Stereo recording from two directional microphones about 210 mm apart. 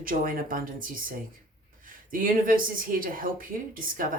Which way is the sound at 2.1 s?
40° right (ahead or behind).